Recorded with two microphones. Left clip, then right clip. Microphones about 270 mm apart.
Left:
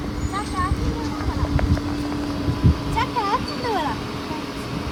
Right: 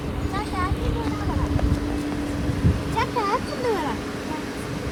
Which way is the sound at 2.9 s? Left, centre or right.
Centre.